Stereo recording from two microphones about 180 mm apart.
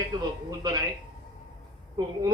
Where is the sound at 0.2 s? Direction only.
20° right (ahead or behind).